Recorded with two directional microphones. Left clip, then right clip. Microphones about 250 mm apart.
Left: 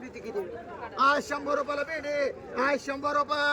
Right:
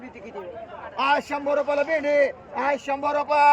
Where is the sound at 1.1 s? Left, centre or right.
Right.